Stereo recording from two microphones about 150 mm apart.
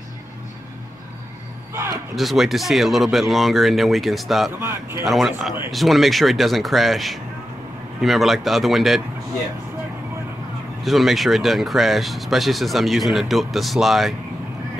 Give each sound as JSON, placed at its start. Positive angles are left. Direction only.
{"t": 1.7, "sound": "a sound", "side_deg": -15}
{"t": 2.1, "sound": "speech", "side_deg": 0}
{"t": 4.6, "sound": "a man's voice", "side_deg": -15}
{"t": 5.0, "sound": "speech", "side_deg": 0}
{"t": 10.8, "sound": "speech", "side_deg": 0}